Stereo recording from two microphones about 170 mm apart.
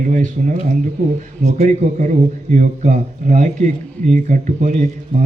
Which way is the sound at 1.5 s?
50° right (ahead or behind).